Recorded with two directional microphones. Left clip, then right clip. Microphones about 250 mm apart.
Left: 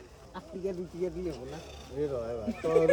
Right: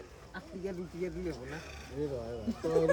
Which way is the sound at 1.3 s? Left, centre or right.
Centre.